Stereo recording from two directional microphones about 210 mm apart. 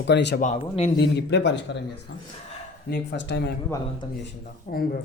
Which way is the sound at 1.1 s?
55° left (ahead or behind).